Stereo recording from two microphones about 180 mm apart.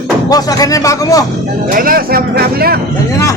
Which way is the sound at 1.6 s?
50° right (ahead or behind).